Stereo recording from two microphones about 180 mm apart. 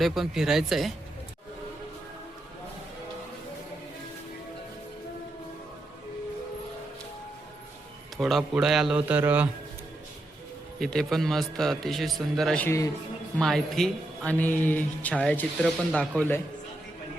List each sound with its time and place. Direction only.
0.0 s a man's voice: centre (ahead or behind)
8.2 s a man's voice: centre (ahead or behind)
10.8 s a man's voice: centre (ahead or behind)
12.6 s speech: 15° left (ahead or behind)
13.4 s speech: centre (ahead or behind)